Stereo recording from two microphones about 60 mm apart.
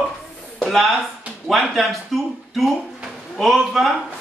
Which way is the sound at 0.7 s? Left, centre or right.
Centre.